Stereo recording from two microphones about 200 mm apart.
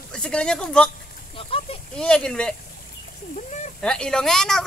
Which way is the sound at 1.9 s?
5° left (ahead or behind).